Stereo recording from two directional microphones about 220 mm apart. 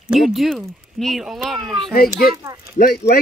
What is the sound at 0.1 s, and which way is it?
Speech, centre (ahead or behind).